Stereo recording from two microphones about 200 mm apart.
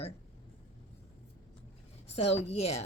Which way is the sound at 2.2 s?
30° left (ahead or behind).